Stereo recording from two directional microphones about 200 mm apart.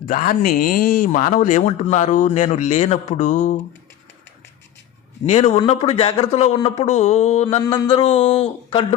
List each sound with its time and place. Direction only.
0.0 s speech: 45° left (ahead or behind)
5.2 s speech: 35° left (ahead or behind)
7.6 s speech: 20° left (ahead or behind)